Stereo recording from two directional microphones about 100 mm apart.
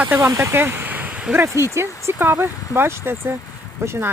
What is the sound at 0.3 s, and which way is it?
Speech, 20° right (ahead or behind).